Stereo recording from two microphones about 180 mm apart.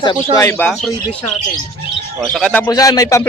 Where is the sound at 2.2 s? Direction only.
5° left (ahead or behind).